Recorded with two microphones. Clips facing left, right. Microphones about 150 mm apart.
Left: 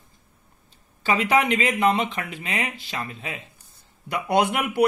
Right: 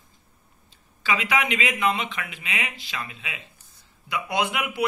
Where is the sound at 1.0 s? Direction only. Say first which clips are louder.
Left 4 dB; 40° left (ahead or behind).